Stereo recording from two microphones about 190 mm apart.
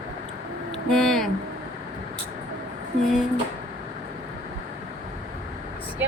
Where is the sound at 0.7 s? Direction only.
Centre (ahead or behind).